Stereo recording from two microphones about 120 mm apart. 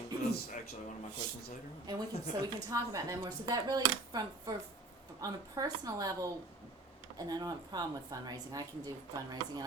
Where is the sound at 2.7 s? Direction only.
30° right (ahead or behind).